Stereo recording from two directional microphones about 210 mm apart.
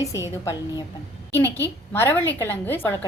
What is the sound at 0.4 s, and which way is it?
A woman's voice, 20° left (ahead or behind).